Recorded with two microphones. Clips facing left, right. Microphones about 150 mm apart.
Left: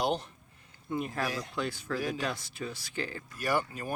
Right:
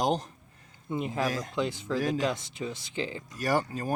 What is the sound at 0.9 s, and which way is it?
Speech, 20° right (ahead or behind).